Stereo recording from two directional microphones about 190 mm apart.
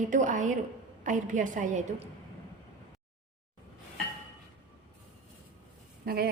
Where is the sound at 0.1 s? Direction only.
40° right (ahead or behind).